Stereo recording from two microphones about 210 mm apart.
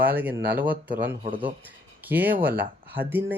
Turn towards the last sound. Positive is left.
turn(degrees=-10)  # may be behind; listen again after turning